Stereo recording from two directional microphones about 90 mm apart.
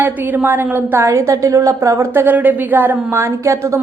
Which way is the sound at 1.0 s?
35° right (ahead or behind).